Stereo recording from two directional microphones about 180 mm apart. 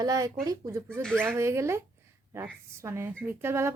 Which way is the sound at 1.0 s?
5° left (ahead or behind).